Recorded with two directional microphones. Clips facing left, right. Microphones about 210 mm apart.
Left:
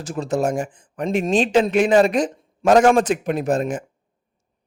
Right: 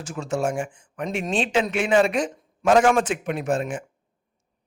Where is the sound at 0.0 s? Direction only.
35° left (ahead or behind).